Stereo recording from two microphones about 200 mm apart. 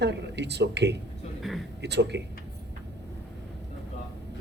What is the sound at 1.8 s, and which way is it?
Speech, 60° right (ahead or behind).